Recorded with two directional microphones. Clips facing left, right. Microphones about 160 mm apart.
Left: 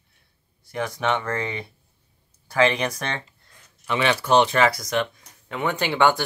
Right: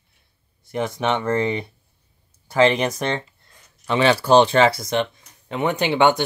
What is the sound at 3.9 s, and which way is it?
Speech, 30° right (ahead or behind).